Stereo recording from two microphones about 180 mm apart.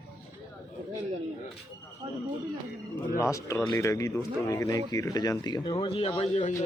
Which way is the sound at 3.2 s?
15° left (ahead or behind).